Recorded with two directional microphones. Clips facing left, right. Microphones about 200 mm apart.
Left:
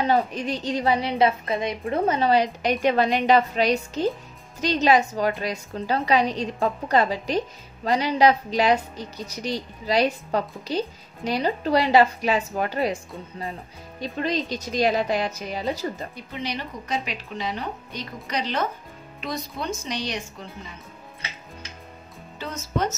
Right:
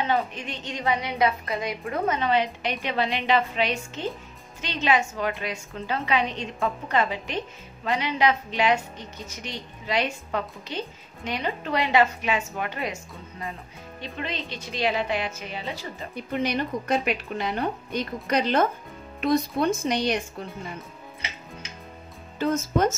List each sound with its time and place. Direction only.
0.0 s a woman's voice: 35° left (ahead or behind)
16.3 s a woman's voice: 50° right (ahead or behind)
22.4 s a woman's voice: 50° right (ahead or behind)